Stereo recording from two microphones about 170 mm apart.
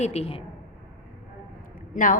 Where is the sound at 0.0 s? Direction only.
40° left (ahead or behind).